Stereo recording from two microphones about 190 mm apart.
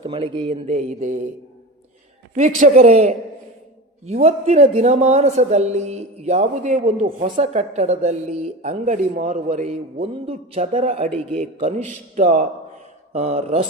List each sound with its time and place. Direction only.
0.0 s a man's voice: 25° right (ahead or behind)
2.3 s a man's voice: 40° right (ahead or behind)
11.1 s a man's voice: 5° left (ahead or behind)
11.6 s a man's voice: 40° right (ahead or behind)